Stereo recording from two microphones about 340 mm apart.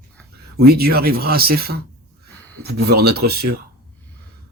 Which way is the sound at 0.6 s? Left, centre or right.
Right.